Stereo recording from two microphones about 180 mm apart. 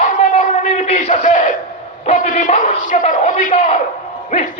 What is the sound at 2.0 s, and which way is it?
A man's voice, 45° left (ahead or behind).